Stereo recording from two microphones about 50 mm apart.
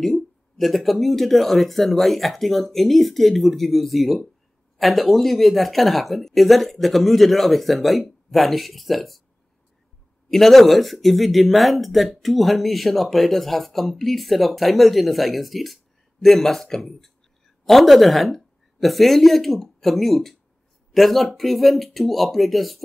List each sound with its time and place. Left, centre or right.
0.0 s speech: centre
10.3 s a woman's voice: centre